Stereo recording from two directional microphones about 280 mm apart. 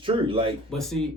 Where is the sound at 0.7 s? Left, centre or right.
Centre.